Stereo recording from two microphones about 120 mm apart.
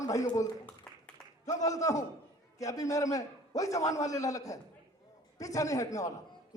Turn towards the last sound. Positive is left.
turn(degrees=30)  # may be behind; listen again after turning